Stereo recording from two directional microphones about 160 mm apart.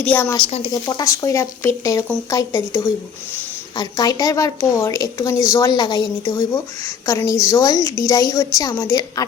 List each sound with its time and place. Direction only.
0.0 s speech: 10° left (ahead or behind)
0.7 s a woman's voice: 25° left (ahead or behind)